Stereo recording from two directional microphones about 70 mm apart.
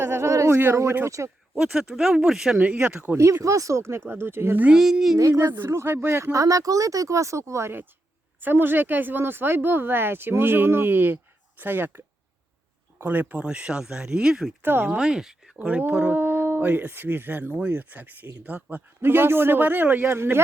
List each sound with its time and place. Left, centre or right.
0.0 s a sound: right
1.0 s speech: right
1.5 s speech: centre
2.8 s speech: centre
3.2 s speech: right
4.6 s speech: centre
5.3 s speech: right
6.3 s speech: right
8.4 s speech: right
13.4 s speech: centre
14.6 s speech: right
14.8 s speech: centre
15.5 s speech: centre; by 20.4 s right